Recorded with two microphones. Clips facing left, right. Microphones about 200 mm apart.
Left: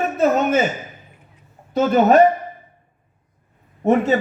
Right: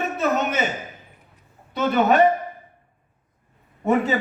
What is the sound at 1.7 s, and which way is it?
Speech, 45° left (ahead or behind).